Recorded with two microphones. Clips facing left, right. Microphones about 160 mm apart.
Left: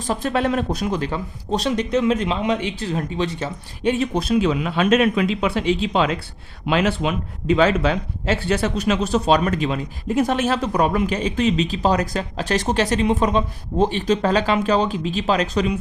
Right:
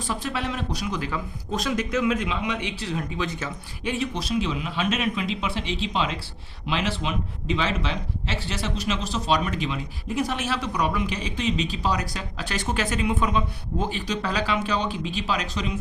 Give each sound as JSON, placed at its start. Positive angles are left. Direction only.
{"t": 0.1, "sound": "a man's voice", "side_deg": 45}
{"t": 4.0, "sound": "a man's voice", "side_deg": 50}
{"t": 15.6, "sound": "speech", "side_deg": 55}